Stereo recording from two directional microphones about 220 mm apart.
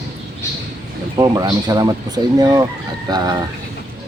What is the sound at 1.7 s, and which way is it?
Speech, 15° right (ahead or behind).